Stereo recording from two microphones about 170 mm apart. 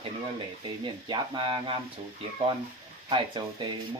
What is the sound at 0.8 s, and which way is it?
Speech, 25° right (ahead or behind).